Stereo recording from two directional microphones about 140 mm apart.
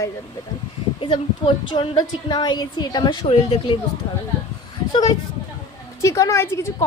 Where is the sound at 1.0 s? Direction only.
40° left (ahead or behind).